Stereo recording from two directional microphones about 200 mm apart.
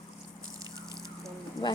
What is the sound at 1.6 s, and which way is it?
Speech, 25° left (ahead or behind).